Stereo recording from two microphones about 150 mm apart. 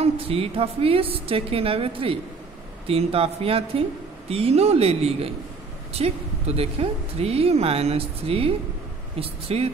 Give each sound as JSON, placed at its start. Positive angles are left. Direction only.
{"t": 0.0, "sound": "speech", "side_deg": -40}